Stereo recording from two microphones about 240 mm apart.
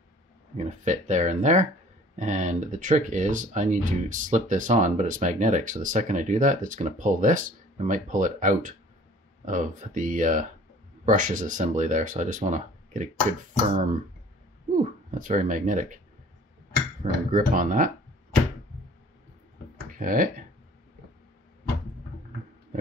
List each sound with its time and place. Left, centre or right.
0.6 s speech: right
14.8 s speech: right
17.0 s speech: right
19.9 s speech: right